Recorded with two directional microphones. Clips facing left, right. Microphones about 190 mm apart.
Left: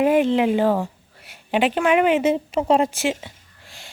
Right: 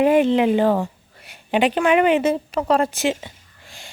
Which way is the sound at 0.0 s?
Centre (ahead or behind).